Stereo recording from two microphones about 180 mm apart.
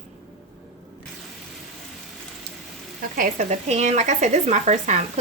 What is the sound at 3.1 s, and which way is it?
Speech, 45° right (ahead or behind).